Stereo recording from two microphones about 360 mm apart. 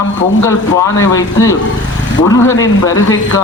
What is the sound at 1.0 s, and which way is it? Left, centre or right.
Speech, centre.